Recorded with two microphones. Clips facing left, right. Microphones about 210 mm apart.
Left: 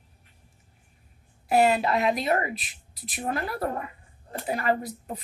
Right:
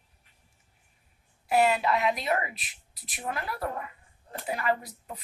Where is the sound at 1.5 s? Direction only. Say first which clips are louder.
Left 2 dB; 40° left (ahead or behind).